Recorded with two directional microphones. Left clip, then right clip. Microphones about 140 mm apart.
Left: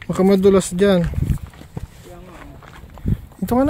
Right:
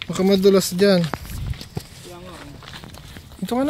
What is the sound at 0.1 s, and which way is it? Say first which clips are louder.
Speech: left 2 dB; 45° left (ahead or behind).